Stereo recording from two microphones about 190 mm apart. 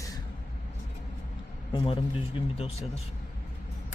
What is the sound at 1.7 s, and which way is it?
Speech, 30° left (ahead or behind).